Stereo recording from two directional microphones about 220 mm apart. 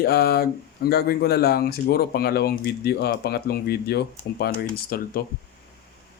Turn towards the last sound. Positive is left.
turn(degrees=45)  # may be behind; listen again after turning